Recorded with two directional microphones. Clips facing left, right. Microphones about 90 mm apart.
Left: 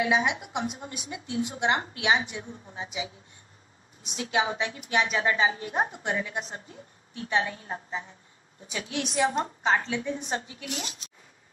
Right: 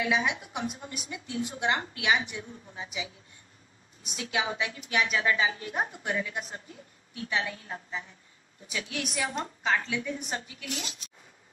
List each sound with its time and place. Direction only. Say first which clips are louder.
0.0 s a woman's voice: left 3 dB; 30° left (ahead or behind)